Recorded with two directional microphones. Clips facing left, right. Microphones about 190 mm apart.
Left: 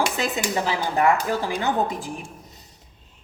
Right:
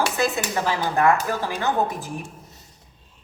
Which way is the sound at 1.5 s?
15° left (ahead or behind).